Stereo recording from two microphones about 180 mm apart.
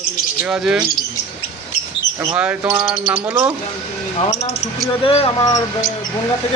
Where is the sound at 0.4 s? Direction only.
Centre (ahead or behind).